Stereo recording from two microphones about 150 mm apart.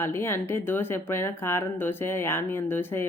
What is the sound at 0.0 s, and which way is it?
Speech, 15° left (ahead or behind).